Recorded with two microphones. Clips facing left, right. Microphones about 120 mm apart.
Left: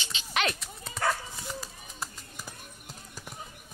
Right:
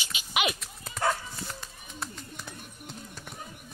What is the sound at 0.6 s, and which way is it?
Dog, centre (ahead or behind).